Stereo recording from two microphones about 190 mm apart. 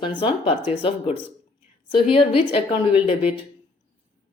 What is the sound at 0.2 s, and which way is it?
A woman's voice, 25° left (ahead or behind).